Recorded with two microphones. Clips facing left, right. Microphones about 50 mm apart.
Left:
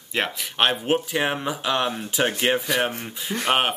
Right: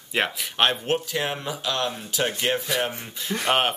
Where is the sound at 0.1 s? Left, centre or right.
Centre; by 2.6 s left.